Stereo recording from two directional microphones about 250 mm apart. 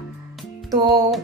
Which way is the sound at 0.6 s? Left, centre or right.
Centre.